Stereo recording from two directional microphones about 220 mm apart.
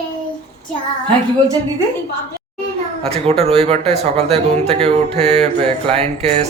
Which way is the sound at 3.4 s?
25° right (ahead or behind).